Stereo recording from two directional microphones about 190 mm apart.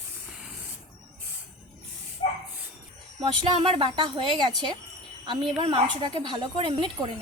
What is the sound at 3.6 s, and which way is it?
Speech, 25° right (ahead or behind).